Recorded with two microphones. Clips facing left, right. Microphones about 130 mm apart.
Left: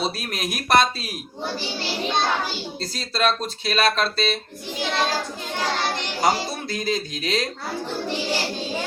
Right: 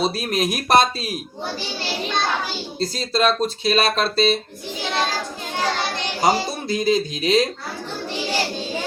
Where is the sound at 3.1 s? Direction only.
25° right (ahead or behind).